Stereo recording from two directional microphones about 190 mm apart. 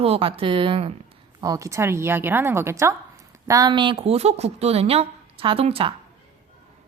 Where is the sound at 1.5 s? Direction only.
15° right (ahead or behind).